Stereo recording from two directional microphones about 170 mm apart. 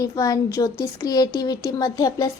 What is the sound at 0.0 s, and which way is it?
Speech, 20° left (ahead or behind).